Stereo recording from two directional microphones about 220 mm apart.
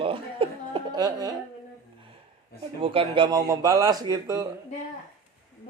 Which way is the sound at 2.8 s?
25° right (ahead or behind).